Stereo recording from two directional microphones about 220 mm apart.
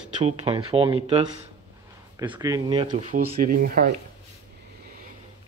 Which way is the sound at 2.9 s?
35° right (ahead or behind).